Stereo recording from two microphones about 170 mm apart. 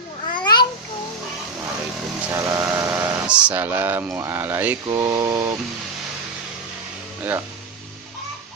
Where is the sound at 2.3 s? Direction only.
20° right (ahead or behind).